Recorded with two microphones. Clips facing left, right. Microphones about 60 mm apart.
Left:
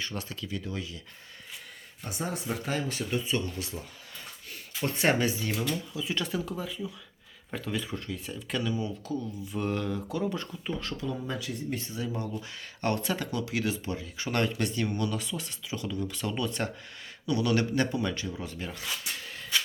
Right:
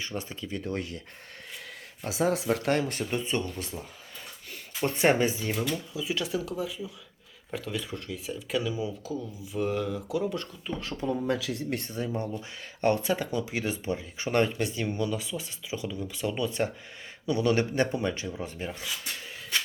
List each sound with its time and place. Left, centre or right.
0.0 s speech: right
0.6 s speech: right
2.0 s speech: right
3.0 s speech: right
4.8 s speech: right
5.5 s speech: centre
10.9 s speech: right
11.3 s speech: right
11.8 s speech: right
12.8 s speech: right